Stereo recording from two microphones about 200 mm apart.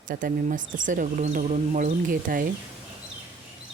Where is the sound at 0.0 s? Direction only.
45° right (ahead or behind).